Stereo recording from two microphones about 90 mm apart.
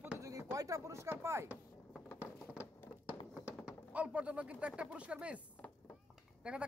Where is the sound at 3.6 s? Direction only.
15° right (ahead or behind).